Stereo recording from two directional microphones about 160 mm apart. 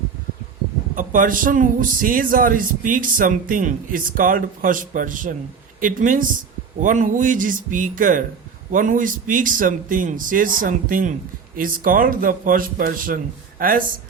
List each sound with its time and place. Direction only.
0.9 s a man's voice: 55° right (ahead or behind)